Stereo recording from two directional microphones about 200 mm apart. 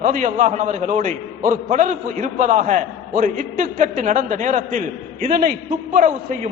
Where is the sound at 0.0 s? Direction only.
40° right (ahead or behind).